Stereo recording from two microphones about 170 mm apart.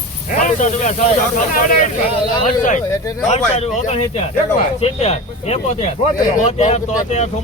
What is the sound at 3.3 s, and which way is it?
Speech, 40° left (ahead or behind).